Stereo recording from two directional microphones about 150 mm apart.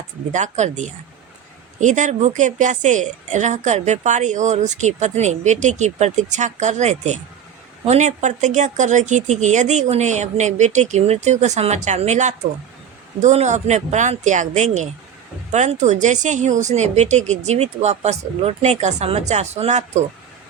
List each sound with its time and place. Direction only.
0.3 s a woman's voice: 55° right (ahead or behind)